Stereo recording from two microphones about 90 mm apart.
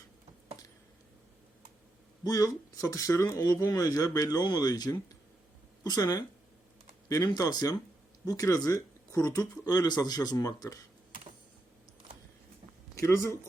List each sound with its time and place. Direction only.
2.2 s speech: 40° left (ahead or behind)
7.3 s speech: 45° left (ahead or behind)
13.0 s speech: 30° left (ahead or behind)